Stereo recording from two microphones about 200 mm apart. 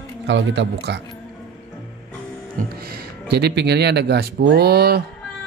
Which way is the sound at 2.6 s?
50° right (ahead or behind).